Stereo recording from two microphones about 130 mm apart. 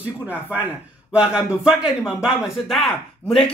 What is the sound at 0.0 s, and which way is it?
A man's voice, 10° right (ahead or behind).